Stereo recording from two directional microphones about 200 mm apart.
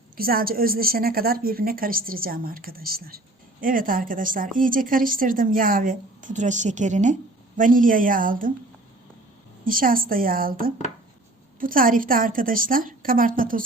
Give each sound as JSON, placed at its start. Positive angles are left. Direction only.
{"t": 0.2, "sound": "a woman's voice", "side_deg": -45}
{"t": 9.6, "sound": "a woman's voice", "side_deg": -45}